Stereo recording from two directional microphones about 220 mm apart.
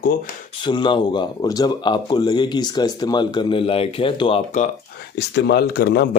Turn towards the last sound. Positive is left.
turn(degrees=45)  # may be behind; listen again after turning